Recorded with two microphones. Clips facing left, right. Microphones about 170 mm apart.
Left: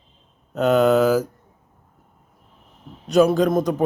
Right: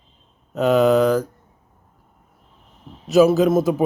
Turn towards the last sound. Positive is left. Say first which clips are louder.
# right 2 dB
turn(degrees=-5)  # may be behind; listen again after turning